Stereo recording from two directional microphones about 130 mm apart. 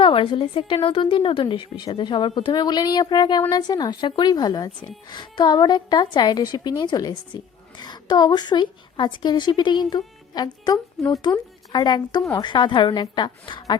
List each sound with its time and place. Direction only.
0.0 s a woman's voice: 45° left (ahead or behind)